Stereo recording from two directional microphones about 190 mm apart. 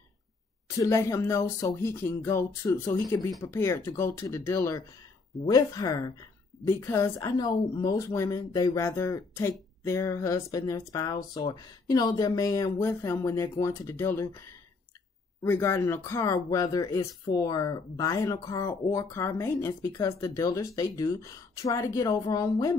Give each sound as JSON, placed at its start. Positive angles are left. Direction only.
{"t": 0.7, "sound": "speech", "side_deg": 15}